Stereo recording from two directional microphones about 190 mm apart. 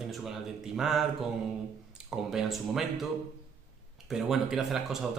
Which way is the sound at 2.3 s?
Centre (ahead or behind).